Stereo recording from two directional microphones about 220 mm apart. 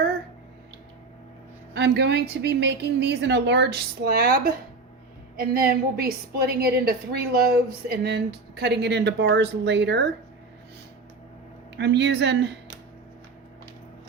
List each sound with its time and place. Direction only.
1.7 s a woman's voice: 50° right (ahead or behind)
11.8 s a woman's voice: 50° right (ahead or behind)